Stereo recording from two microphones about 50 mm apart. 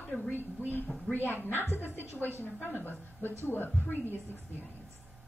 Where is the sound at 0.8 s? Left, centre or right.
Centre.